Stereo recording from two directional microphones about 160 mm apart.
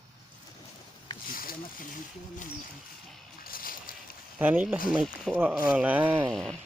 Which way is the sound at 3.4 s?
65° left (ahead or behind).